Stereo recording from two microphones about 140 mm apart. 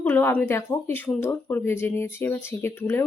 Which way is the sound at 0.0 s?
15° left (ahead or behind).